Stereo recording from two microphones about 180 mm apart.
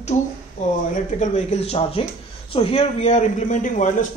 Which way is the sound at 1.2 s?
40° left (ahead or behind).